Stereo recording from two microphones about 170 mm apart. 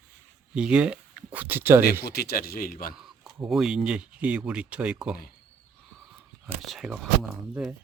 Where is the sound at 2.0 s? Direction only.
65° left (ahead or behind).